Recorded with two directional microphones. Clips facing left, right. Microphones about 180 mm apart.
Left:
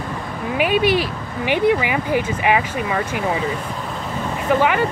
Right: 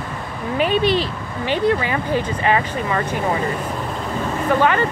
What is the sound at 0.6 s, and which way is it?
Speech, 10° left (ahead or behind).